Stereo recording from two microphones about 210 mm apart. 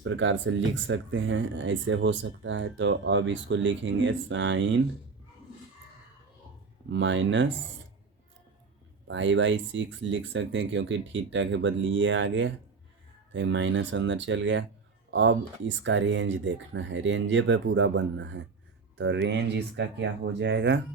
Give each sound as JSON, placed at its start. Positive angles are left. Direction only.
{"t": 0.0, "sound": "speech", "side_deg": -65}
{"t": 6.9, "sound": "speech", "side_deg": -60}
{"t": 9.0, "sound": "speech", "side_deg": -60}